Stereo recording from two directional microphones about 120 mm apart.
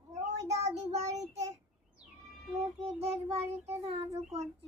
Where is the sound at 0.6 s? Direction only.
65° right (ahead or behind).